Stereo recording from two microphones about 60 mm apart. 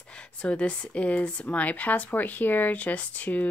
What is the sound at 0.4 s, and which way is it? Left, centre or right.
Speech, centre.